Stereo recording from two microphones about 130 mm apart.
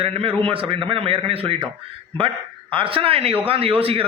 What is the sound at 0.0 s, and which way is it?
A man's voice, 45° right (ahead or behind).